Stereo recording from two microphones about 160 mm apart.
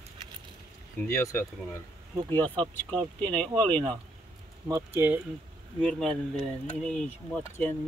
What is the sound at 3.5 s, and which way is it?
Speech, 25° right (ahead or behind).